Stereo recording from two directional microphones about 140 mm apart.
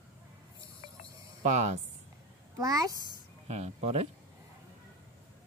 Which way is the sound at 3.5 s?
50° right (ahead or behind).